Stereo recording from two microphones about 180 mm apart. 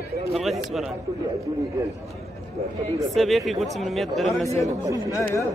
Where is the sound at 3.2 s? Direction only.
Centre (ahead or behind).